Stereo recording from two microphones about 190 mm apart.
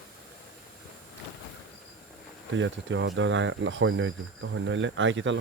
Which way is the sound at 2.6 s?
80° right.